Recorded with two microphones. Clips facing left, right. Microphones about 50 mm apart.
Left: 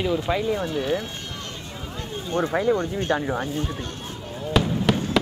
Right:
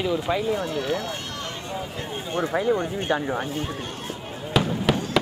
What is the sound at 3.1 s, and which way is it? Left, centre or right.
Speech, centre.